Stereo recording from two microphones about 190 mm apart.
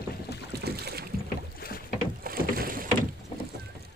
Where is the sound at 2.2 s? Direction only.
50° right (ahead or behind).